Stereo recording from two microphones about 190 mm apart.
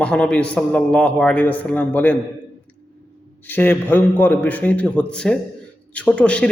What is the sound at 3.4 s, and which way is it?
A man's voice, 10° left (ahead or behind).